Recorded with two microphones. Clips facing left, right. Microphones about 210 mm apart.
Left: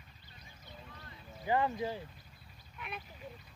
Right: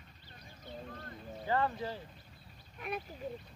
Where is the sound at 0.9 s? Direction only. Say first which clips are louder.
Right 7 dB; 50° right (ahead or behind).